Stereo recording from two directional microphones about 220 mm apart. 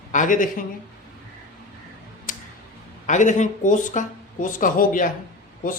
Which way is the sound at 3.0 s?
35° left (ahead or behind).